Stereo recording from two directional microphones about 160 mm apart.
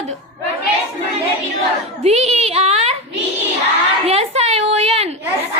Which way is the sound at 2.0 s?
40° right (ahead or behind).